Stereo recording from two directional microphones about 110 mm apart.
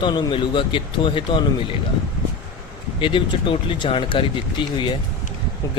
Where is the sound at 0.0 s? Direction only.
45° left (ahead or behind).